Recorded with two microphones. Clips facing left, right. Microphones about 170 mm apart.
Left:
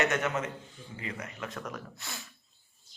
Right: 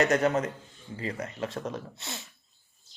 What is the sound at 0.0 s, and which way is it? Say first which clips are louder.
A man's voice: right 5 dB; 35° right (ahead or behind).